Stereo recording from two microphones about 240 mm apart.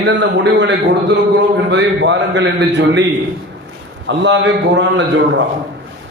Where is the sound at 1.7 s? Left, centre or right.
Right.